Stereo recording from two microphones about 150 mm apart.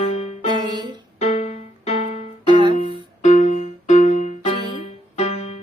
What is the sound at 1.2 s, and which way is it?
Music, 45° left (ahead or behind).